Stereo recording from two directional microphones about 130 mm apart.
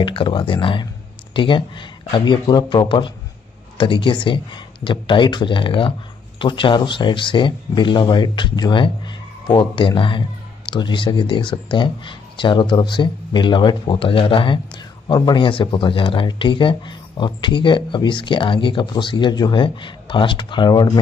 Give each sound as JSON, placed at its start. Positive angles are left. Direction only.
{"t": 0.0, "sound": "speech", "side_deg": 40}